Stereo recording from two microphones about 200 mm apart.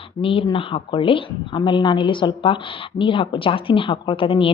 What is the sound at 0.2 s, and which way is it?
A woman's voice, 25° left (ahead or behind).